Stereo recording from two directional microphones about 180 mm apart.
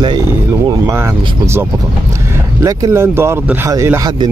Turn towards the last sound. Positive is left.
turn(degrees=-20)  # may be behind; listen again after turning